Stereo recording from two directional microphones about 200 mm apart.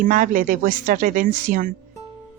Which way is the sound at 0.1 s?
40° right (ahead or behind).